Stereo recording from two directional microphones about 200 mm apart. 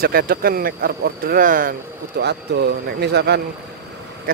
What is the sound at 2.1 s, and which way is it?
Speech, 55° right (ahead or behind).